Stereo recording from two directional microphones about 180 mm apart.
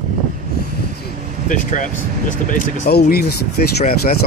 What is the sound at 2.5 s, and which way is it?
Speech, 55° left (ahead or behind).